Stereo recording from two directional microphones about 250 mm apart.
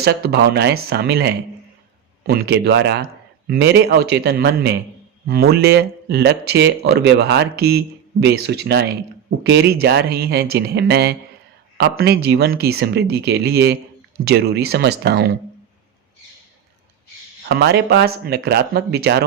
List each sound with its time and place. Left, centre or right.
0.0 s speech: right
17.6 s speech: right